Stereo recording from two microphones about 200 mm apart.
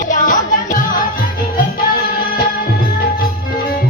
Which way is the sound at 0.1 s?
40° left (ahead or behind).